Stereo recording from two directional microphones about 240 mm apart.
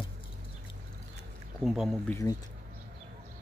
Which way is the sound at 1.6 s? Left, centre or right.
Centre.